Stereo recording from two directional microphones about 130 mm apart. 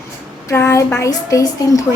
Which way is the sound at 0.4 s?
20° left (ahead or behind).